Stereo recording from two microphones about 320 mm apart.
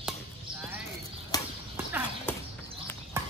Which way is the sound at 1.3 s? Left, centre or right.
Centre.